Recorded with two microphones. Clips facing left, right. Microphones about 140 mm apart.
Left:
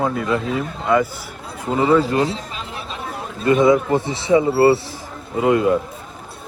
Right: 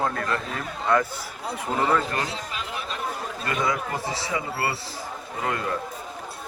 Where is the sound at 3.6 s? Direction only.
25° left (ahead or behind).